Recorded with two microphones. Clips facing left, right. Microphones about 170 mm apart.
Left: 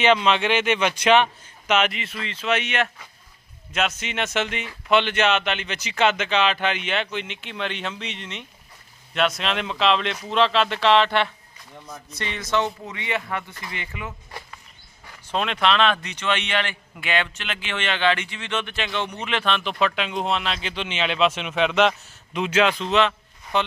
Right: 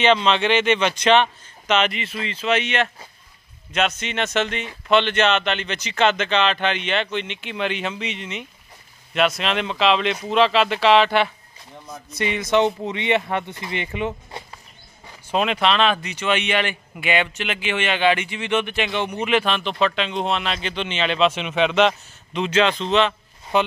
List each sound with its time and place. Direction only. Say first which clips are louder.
0.0 s a man's voice: right 1 dB; 5° left (ahead or behind); by 14.6 s 25° right (ahead or behind)
15.3 s a man's voice: right 2 dB; 5° right (ahead or behind)
23.5 s speech: right 4 dB; 10° right (ahead or behind)